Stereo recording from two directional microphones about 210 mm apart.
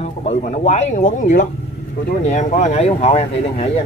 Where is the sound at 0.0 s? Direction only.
30° left (ahead or behind).